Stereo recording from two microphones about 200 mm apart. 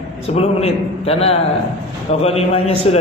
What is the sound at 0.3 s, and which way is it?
A man's voice, 30° left (ahead or behind).